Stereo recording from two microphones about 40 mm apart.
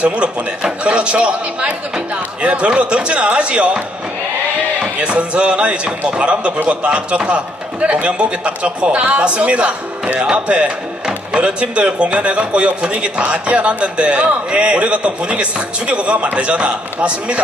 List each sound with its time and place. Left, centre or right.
0.0 s a man's voice: right
5.0 s a man's voice: right